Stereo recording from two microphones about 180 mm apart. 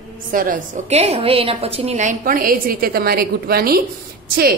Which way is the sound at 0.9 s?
35° right (ahead or behind).